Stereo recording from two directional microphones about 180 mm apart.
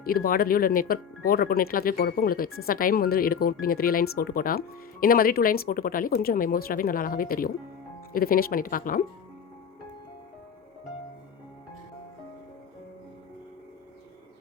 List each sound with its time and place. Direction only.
0.0 s speech: 55° left (ahead or behind)